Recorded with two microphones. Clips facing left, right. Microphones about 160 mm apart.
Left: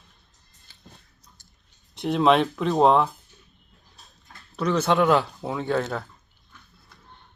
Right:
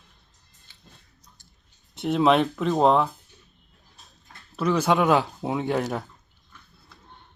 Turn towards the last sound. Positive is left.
turn(degrees=-15)  # may be behind; listen again after turning